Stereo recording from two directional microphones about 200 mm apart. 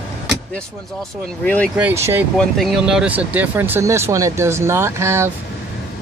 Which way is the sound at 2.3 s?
Centre (ahead or behind).